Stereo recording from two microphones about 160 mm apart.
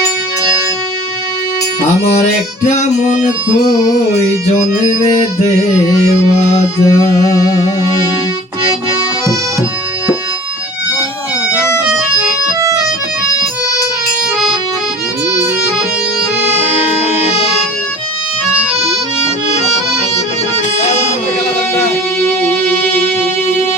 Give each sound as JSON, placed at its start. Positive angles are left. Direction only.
{"t": 2.8, "sound": "music", "side_deg": 50}
{"t": 6.8, "sound": "music", "side_deg": 20}
{"t": 18.5, "sound": "accordion", "side_deg": -5}